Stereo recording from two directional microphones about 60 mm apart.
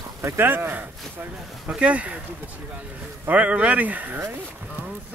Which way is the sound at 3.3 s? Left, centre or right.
Right.